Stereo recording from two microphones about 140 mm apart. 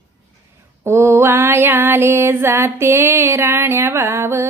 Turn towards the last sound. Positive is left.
turn(degrees=-20)  # may be behind; listen again after turning